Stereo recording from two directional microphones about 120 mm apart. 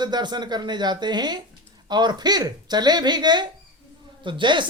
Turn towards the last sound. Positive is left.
turn(degrees=-40)  # may be behind; listen again after turning